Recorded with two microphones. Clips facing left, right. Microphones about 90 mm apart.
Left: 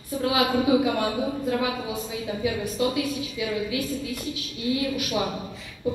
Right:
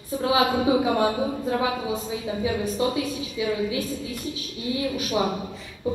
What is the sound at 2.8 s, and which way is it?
Speech, 30° right (ahead or behind).